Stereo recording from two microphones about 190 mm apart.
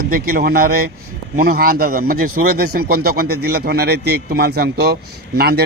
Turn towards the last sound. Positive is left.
turn(degrees=-55)  # may be behind; listen again after turning